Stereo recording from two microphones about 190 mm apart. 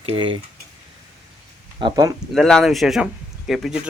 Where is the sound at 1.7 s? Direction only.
20° right (ahead or behind).